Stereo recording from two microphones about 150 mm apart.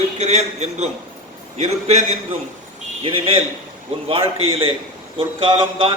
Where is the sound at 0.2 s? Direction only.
50° right (ahead or behind).